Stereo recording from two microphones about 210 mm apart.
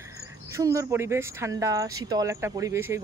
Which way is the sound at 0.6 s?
15° right (ahead or behind).